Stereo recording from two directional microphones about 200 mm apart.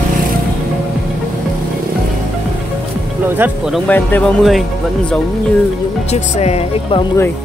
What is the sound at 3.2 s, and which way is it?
Speech, 10° right (ahead or behind).